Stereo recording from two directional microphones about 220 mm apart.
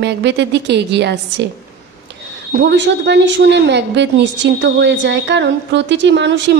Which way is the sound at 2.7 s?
55° right (ahead or behind).